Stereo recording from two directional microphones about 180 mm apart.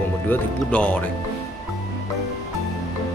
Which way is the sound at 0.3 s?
5° left (ahead or behind).